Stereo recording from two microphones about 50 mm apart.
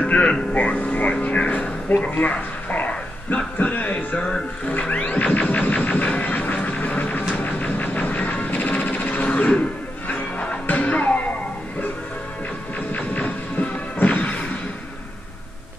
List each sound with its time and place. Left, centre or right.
0.0 s speech: left
2.1 s a sound: left
3.7 s music: left
7.3 s a sound: left
10.7 s music: left
12.9 s music: left